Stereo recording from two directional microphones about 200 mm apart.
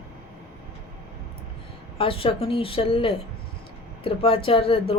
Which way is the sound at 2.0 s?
25° left (ahead or behind).